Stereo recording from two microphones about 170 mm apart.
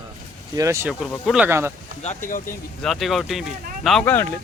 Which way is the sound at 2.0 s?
50° left (ahead or behind).